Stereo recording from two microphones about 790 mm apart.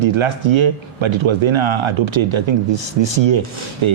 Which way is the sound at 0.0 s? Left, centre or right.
Right.